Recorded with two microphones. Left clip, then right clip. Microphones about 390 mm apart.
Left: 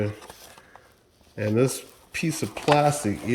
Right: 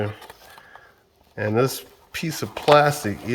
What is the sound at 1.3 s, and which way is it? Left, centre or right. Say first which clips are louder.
Speech: right 2 dB; centre.